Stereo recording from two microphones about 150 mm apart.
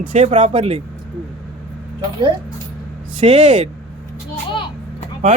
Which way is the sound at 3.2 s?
50° right (ahead or behind).